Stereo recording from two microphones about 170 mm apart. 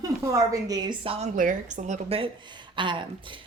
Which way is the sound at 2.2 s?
25° right (ahead or behind).